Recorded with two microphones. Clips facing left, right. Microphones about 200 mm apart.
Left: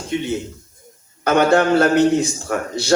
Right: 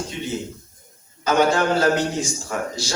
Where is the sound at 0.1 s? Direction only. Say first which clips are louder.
Left 6 dB; 65° left (ahead or behind).